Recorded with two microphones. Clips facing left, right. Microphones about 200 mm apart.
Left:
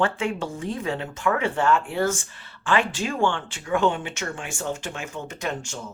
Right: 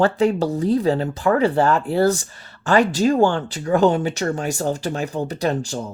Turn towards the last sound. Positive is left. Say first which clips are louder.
# right 8 dB
turn(degrees=-35)  # may be behind; listen again after turning